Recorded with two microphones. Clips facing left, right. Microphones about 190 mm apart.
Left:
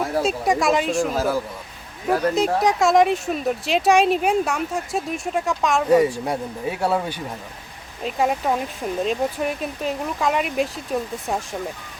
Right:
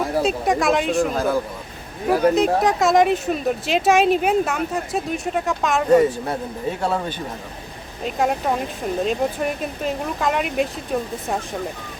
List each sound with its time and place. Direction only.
0.0 s speech: centre (ahead or behind)